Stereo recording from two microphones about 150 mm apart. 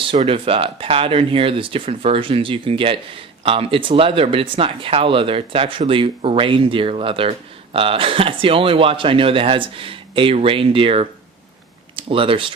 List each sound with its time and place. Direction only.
0.1 s speech: 35° right (ahead or behind)